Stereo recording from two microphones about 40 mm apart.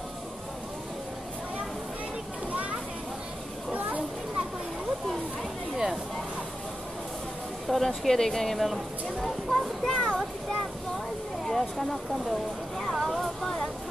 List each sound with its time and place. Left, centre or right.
7.6 s speech: centre
9.8 s a child's voice: left
11.4 s speech: centre
12.9 s a sound: centre